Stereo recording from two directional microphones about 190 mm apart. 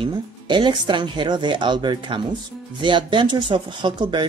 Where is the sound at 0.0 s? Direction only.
25° right (ahead or behind).